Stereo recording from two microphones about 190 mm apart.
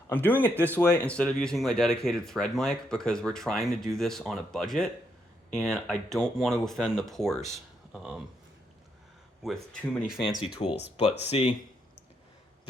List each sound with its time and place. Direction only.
0.1 s speech: 10° left (ahead or behind)
9.4 s speech: 5° left (ahead or behind)
10.4 s speech: 30° left (ahead or behind)